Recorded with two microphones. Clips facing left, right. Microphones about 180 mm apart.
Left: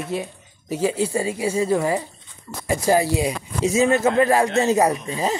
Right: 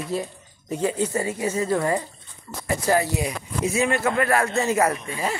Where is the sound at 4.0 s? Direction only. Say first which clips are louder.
Left 4 dB; 20° left (ahead or behind).